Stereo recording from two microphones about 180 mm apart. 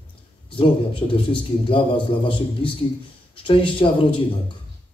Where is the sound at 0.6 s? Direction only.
30° left (ahead or behind).